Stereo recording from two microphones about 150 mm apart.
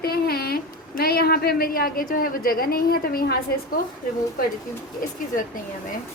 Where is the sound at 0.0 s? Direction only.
90° left.